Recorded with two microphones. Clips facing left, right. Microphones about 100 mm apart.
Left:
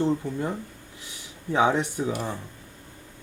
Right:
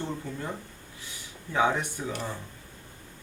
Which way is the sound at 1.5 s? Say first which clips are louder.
Left 4 dB; 20° left (ahead or behind).